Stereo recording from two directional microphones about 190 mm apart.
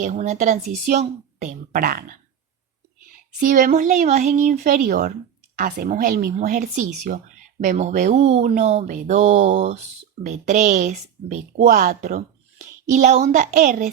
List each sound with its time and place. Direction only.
0.0 s speech: 40° right (ahead or behind)
3.4 s speech: 45° right (ahead or behind)